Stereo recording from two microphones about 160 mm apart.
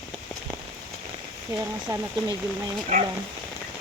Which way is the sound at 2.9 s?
55° right (ahead or behind).